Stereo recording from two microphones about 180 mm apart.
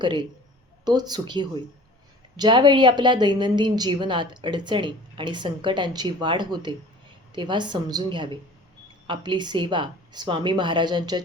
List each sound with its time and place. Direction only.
0.0 s a woman's voice: 25° right (ahead or behind)